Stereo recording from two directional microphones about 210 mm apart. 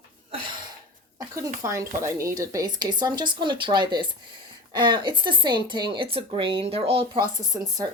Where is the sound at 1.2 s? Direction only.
15° right (ahead or behind).